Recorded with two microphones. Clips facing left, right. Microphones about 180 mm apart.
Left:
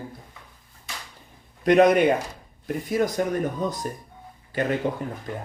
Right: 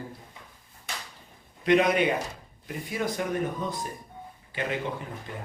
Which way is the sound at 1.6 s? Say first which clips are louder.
Left 6 dB; 45° left (ahead or behind).